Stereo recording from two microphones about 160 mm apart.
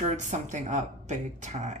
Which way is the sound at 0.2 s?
50° right (ahead or behind).